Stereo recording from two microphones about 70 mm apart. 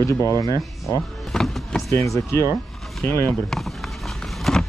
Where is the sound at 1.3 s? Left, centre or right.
Centre.